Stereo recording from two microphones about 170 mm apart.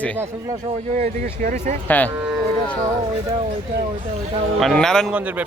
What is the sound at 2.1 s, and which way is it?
Speech, 15° right (ahead or behind).